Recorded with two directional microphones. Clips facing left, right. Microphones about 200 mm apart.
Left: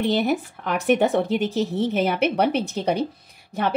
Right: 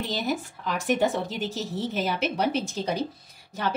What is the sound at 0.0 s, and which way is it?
Speech, 60° left (ahead or behind).